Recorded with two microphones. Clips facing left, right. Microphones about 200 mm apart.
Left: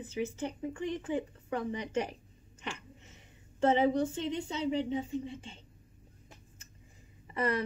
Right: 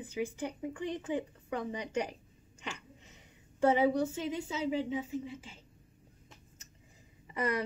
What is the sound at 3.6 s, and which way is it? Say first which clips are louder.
A woman's voice: even; 10° right (ahead or behind).